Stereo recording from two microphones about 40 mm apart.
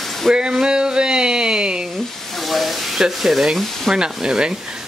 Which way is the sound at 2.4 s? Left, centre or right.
Centre.